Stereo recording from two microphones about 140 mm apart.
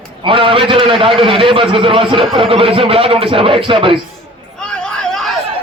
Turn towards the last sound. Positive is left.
turn(degrees=5)  # may be behind; listen again after turning